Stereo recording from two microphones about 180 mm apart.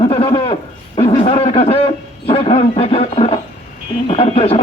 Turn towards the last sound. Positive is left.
turn(degrees=35)  # may be behind; listen again after turning